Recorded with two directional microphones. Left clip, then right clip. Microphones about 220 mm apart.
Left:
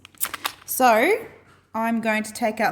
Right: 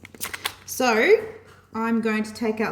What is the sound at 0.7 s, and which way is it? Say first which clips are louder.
A woman's voice: left 1 dB; 45° left (ahead or behind).